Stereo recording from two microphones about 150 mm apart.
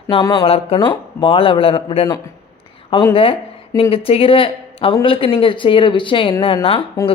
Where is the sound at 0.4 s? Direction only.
40° left (ahead or behind).